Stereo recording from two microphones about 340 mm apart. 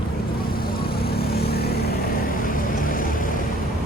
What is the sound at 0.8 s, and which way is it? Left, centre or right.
Vehicle, left.